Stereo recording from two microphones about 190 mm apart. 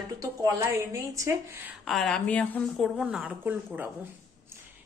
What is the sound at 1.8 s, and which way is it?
A woman's voice, centre (ahead or behind).